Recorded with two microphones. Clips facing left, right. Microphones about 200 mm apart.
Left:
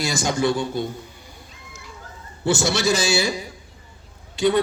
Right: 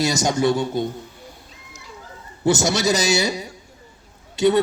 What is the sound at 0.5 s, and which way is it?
Speech, 45° right (ahead or behind).